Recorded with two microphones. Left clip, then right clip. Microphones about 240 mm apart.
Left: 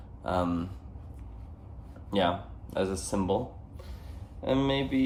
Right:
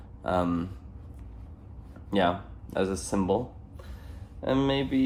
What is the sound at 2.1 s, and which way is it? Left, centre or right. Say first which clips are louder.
Speech: right 2 dB; right.